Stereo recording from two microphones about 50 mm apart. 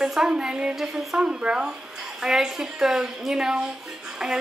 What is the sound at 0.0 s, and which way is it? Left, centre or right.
A woman's voice, centre.